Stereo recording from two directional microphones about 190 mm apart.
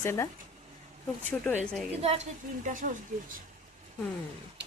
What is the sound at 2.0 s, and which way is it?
Speech, 35° right (ahead or behind).